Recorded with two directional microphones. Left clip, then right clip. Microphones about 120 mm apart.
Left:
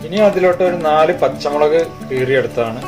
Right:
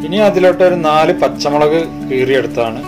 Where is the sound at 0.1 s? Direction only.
85° right; by 1.8 s 65° right (ahead or behind).